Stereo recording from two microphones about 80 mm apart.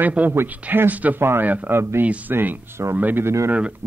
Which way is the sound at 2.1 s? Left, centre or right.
Centre.